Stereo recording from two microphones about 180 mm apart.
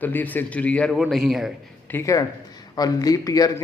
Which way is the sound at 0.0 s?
10° left (ahead or behind).